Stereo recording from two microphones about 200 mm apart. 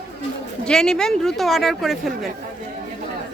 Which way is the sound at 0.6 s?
5° left (ahead or behind).